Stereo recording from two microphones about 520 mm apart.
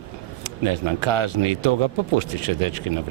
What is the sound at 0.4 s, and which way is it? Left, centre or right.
A man's voice, right.